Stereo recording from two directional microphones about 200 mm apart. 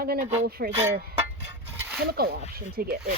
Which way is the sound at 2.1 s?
50° right (ahead or behind).